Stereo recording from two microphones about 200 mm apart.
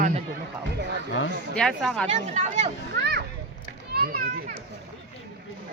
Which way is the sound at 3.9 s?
50° right (ahead or behind).